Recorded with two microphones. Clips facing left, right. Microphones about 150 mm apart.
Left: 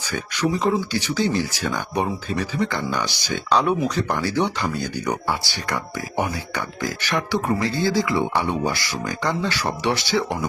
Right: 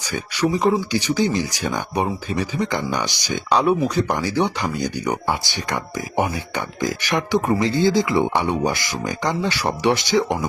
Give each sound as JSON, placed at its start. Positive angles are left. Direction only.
{"t": 0.5, "sound": "speech", "side_deg": -15}